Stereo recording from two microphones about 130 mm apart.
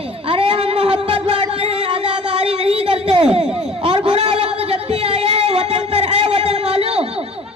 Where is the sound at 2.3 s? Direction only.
50° right (ahead or behind).